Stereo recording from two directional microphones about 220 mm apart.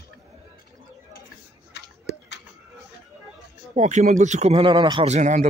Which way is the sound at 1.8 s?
50° left (ahead or behind).